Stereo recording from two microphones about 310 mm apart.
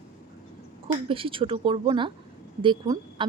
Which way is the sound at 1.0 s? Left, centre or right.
Centre.